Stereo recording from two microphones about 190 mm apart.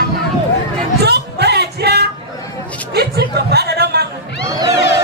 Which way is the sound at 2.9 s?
60° right (ahead or behind).